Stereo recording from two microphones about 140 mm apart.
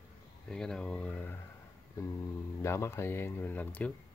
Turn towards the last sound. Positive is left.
turn(degrees=10)  # may be behind; listen again after turning